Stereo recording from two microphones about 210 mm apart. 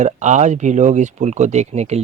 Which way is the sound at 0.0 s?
35° right (ahead or behind).